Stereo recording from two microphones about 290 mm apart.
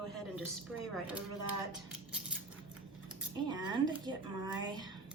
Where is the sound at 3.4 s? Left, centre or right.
Centre.